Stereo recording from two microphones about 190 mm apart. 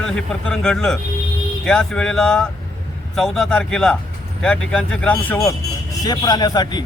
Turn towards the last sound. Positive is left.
turn(degrees=20)  # may be behind; listen again after turning